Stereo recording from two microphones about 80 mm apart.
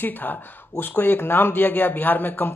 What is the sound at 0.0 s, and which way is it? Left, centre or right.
A man's voice, left.